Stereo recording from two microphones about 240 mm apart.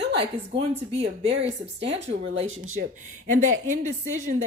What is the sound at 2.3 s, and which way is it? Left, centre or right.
Speech, right.